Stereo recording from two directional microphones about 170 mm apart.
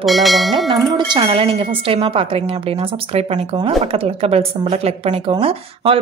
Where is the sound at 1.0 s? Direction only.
25° right (ahead or behind).